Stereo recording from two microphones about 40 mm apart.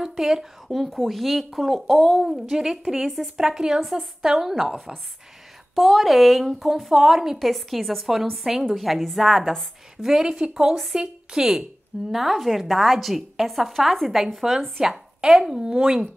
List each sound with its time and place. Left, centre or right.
0.0 s a woman's voice: centre
0.8 s speech: centre
2.2 s a woman's voice: centre
3.4 s a woman's voice: centre
7.3 s speech: centre
10.0 s a woman's voice: centre
12.1 s speech: centre
14.5 s a woman's voice: centre